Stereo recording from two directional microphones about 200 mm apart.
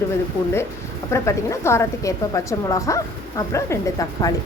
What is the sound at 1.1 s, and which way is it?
A woman's voice, 15° left (ahead or behind).